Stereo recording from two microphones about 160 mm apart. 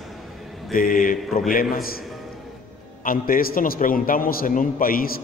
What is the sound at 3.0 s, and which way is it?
A man's voice, 60° left (ahead or behind).